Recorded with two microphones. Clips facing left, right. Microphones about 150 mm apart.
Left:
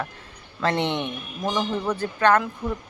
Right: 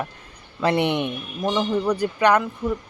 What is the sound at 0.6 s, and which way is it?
Speech, 10° right (ahead or behind).